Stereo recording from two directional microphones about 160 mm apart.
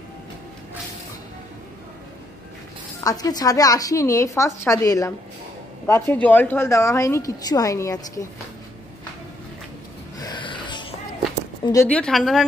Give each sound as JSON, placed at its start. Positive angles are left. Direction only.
{"t": 3.0, "sound": "a woman's voice", "side_deg": 20}
{"t": 10.1, "sound": "wheeze", "side_deg": 25}
{"t": 11.6, "sound": "a woman's voice", "side_deg": 20}
{"t": 11.9, "sound": "a woman's voice", "side_deg": 5}